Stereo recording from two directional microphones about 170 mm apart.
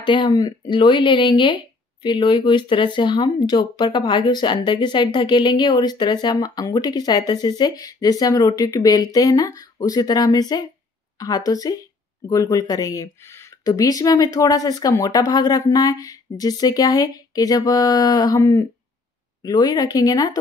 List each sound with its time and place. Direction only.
0.0 s speech: 30° left (ahead or behind)